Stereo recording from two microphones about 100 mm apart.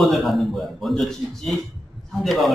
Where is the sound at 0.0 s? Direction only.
Centre (ahead or behind).